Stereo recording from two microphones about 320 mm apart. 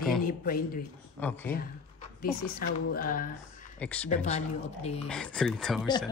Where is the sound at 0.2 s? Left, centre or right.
Left.